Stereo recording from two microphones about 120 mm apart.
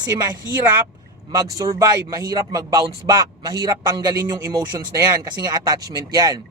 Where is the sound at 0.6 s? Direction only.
20° right (ahead or behind).